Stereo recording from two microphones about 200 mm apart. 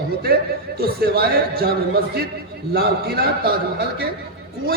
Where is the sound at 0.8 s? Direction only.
50° right (ahead or behind).